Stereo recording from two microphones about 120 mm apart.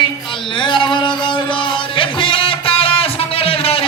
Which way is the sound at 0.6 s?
45° left (ahead or behind).